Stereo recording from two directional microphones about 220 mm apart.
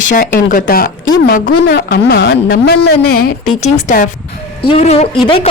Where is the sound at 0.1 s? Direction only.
40° left (ahead or behind).